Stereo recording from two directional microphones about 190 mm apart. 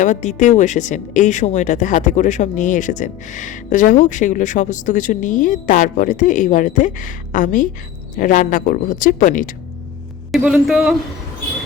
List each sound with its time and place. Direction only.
0.0 s a woman's voice: 40° left (ahead or behind)
10.3 s speech: 5° right (ahead or behind)